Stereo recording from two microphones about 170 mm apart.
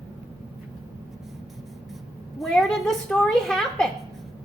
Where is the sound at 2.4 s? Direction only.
Centre (ahead or behind).